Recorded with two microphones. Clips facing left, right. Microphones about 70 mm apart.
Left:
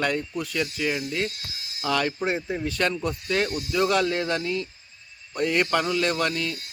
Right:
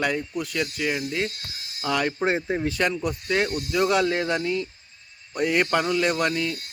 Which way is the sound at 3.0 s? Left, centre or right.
Centre.